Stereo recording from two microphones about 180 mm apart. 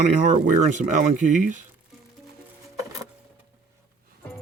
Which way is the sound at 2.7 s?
20° right (ahead or behind).